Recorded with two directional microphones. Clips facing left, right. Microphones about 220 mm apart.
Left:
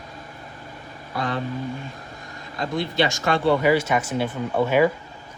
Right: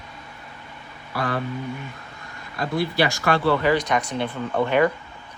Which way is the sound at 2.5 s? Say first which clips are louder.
Right 1 dB; 20° left (ahead or behind).